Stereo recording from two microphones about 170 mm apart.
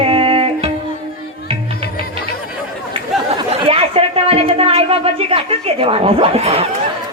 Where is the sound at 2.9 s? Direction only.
35° right (ahead or behind).